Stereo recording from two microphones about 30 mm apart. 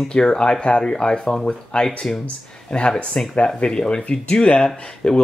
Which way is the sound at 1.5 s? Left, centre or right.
Left.